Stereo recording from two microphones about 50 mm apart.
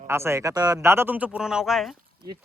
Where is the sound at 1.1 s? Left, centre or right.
Right.